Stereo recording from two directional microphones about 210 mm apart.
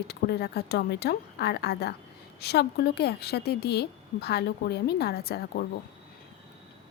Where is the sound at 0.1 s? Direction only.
50° left (ahead or behind).